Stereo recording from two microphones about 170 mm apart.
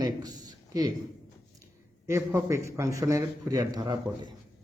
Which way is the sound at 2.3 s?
15° right (ahead or behind).